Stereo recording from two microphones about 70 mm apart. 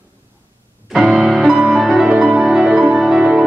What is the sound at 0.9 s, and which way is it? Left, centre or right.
Music, centre.